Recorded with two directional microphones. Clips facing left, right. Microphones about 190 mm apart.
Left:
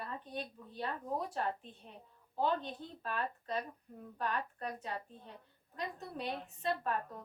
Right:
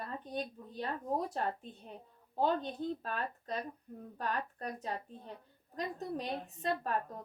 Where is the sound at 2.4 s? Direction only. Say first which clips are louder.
Right 3 dB; 40° right (ahead or behind).